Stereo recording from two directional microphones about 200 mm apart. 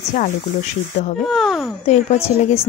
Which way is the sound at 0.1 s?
40° left (ahead or behind).